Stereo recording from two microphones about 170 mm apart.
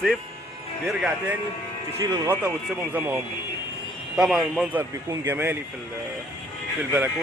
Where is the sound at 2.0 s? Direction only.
25° right (ahead or behind).